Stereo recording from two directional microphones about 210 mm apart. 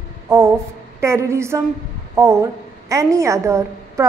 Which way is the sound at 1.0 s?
15° right (ahead or behind).